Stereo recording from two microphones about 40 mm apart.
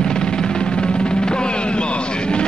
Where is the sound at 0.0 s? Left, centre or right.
Left.